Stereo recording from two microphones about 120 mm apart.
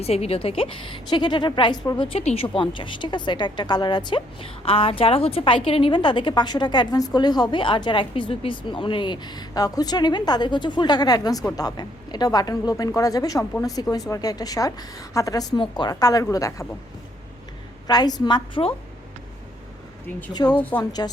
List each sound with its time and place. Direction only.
0.0 s a woman's voice: 55° left (ahead or behind); by 2.0 s 35° left (ahead or behind)
2.1 s a woman's voice: 55° left (ahead or behind); by 16.6 s 30° left (ahead or behind)
17.8 s a woman's voice: 35° left (ahead or behind)
20.3 s a woman's voice: 35° left (ahead or behind)
20.6 s speech: 15° left (ahead or behind)